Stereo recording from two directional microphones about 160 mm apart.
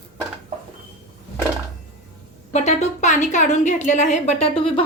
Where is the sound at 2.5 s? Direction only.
45° left (ahead or behind).